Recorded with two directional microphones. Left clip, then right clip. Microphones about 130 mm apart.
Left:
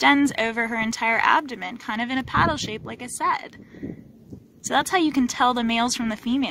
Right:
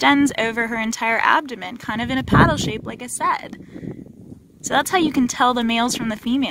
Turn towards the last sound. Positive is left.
turn(degrees=-30)  # may be behind; listen again after turning